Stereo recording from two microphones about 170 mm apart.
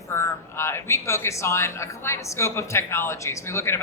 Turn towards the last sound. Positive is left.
turn(degrees=15)  # may be behind; listen again after turning